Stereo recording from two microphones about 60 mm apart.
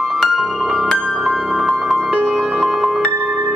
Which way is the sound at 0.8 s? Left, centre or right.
Centre.